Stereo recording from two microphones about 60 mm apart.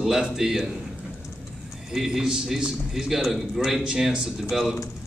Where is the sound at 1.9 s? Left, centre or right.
Centre.